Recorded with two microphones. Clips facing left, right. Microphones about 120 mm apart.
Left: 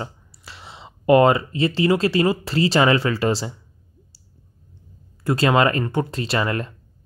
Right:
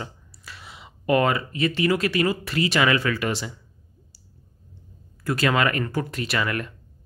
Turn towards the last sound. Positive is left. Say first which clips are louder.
# left 3 dB
turn(degrees=30)  # may be behind; listen again after turning